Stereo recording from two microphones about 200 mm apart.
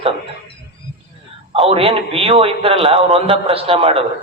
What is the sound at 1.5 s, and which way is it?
A man's voice, 30° right (ahead or behind).